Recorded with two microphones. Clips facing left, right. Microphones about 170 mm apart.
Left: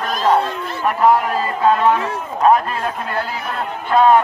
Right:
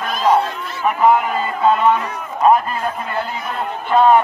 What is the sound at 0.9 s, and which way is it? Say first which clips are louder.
A man's voice: even; centre (ahead or behind).